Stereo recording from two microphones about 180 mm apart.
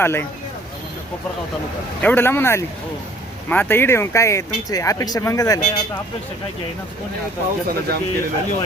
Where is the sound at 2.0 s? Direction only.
10° left (ahead or behind).